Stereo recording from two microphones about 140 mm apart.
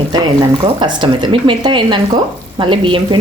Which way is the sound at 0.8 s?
35° right (ahead or behind).